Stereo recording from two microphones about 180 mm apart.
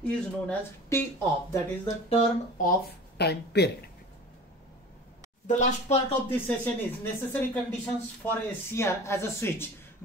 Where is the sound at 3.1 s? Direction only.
65° left (ahead or behind).